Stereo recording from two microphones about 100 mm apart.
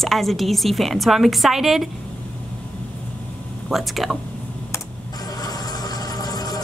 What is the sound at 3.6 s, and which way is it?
Speech, centre (ahead or behind).